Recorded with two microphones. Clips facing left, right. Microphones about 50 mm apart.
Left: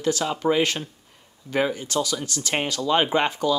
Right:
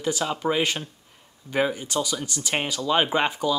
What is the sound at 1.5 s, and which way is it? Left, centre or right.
Speech, centre.